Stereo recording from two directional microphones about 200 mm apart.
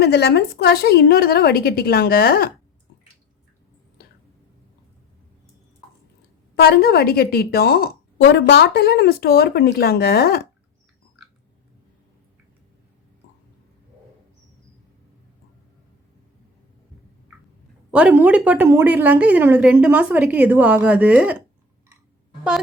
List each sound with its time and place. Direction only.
0.0 s a woman's voice: 55° left (ahead or behind)
6.6 s a woman's voice: 50° left (ahead or behind)
17.9 s a woman's voice: 10° right (ahead or behind)